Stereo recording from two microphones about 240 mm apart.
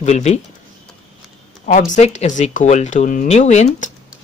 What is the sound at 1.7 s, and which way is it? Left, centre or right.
Speech, left.